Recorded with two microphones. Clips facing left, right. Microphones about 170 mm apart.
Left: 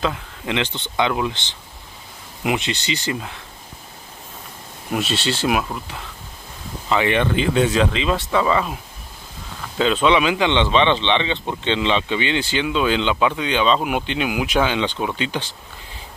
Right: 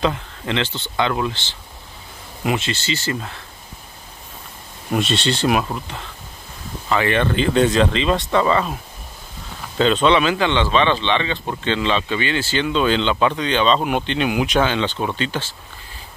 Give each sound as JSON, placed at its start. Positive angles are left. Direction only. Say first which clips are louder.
{"t": 0.5, "sound": "speech", "louder": "even", "side_deg": 15}
{"t": 4.9, "sound": "speech", "louder": "right 2 dB", "side_deg": 5}
{"t": 6.9, "sound": "speech", "louder": "even", "side_deg": 15}
{"t": 9.8, "sound": "speech", "louder": "right 1 dB", "side_deg": 5}